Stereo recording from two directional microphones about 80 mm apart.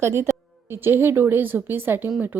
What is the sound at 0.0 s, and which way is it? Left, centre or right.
A woman's voice, right.